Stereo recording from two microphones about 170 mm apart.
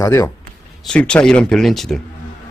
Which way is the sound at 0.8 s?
5° left (ahead or behind).